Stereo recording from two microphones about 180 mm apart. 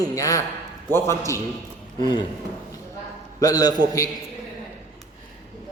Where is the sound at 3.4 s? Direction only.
20° left (ahead or behind).